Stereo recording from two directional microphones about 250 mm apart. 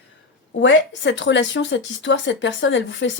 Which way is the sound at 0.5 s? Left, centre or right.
Left.